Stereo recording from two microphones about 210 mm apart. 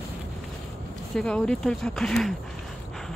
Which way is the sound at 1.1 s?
5° left (ahead or behind).